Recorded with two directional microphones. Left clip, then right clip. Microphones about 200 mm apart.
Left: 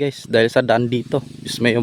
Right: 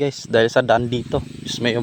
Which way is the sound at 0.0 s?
25° left (ahead or behind).